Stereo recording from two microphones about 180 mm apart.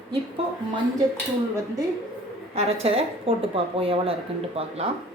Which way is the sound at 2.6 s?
35° right (ahead or behind).